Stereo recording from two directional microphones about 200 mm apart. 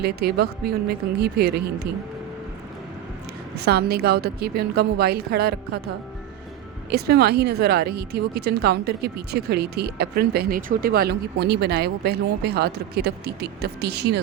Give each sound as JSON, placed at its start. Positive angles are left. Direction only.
{"t": 0.0, "sound": "speech", "side_deg": -55}
{"t": 3.5, "sound": "speech", "side_deg": -55}
{"t": 6.9, "sound": "speech", "side_deg": -50}